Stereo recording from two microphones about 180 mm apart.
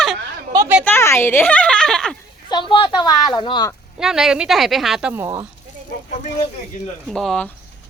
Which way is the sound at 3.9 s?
5° right (ahead or behind).